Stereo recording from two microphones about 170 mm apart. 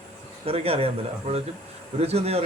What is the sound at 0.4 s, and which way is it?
Speech, 35° right (ahead or behind).